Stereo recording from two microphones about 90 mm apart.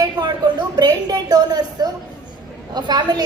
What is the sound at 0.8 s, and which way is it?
A woman's voice, 50° right (ahead or behind).